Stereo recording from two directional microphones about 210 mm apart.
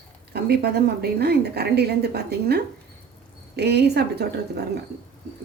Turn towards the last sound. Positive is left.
turn(degrees=-50)  # may be behind; listen again after turning